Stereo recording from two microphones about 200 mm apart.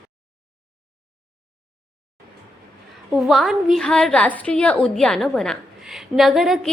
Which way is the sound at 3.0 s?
Centre (ahead or behind).